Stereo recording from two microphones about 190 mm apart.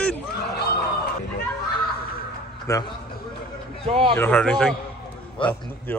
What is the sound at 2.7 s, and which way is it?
Speech, 15° left (ahead or behind).